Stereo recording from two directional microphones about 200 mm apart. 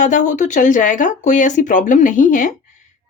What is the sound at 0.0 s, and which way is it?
Speech, 40° left (ahead or behind).